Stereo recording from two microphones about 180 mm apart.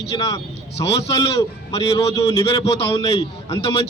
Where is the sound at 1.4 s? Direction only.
20° left (ahead or behind).